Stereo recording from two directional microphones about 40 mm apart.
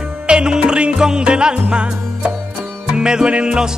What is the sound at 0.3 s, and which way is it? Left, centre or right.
Music, right.